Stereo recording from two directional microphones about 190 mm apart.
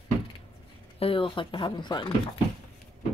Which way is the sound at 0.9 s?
30° left (ahead or behind).